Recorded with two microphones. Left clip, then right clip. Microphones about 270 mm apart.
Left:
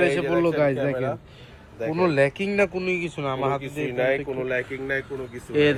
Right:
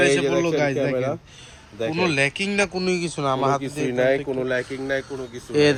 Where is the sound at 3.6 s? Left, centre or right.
Right.